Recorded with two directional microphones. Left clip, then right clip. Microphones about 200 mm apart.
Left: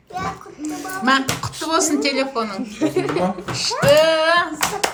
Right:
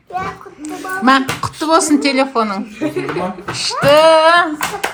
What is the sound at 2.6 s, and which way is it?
Speech, 60° left (ahead or behind).